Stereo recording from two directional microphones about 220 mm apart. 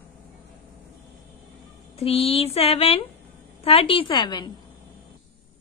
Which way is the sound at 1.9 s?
25° left (ahead or behind).